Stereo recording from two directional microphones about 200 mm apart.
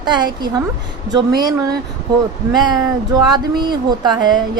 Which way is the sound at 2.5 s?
20° right (ahead or behind).